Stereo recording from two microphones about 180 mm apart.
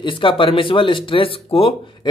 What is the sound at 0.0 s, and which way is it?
Speech, 30° left (ahead or behind).